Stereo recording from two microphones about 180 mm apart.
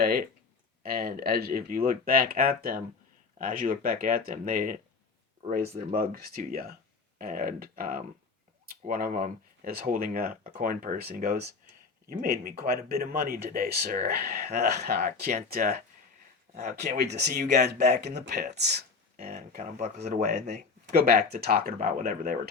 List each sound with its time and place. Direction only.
0.0 s speech: 55° right (ahead or behind)
5.9 s speech: 50° right (ahead or behind)
16.6 s speech: 45° right (ahead or behind)
17.0 s speech: 65° right (ahead or behind)
19.1 s speech: 50° right (ahead or behind)
20.0 s speech: 55° right (ahead or behind)